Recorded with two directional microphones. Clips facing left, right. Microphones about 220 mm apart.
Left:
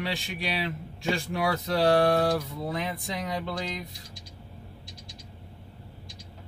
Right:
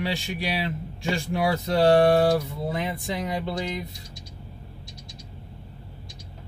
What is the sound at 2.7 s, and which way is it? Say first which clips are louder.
Speech: right 4 dB; centre (ahead or behind).